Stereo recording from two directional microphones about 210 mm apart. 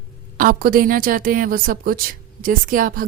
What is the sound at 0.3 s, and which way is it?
A woman's voice, 40° right (ahead or behind).